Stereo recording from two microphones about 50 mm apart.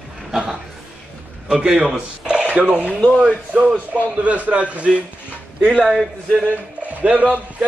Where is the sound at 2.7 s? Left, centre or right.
Right.